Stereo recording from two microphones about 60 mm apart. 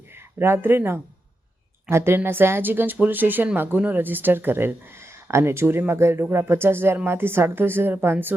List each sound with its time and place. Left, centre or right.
0.1 s speech: right